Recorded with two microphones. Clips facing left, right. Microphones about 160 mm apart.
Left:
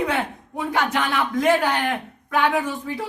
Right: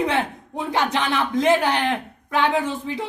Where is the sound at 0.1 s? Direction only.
25° right (ahead or behind).